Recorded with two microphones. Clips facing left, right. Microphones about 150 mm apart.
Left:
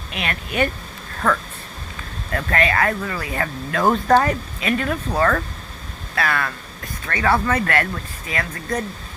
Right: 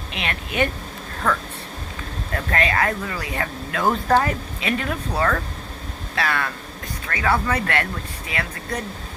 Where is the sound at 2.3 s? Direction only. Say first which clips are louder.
Left 2 dB; 20° right (ahead or behind).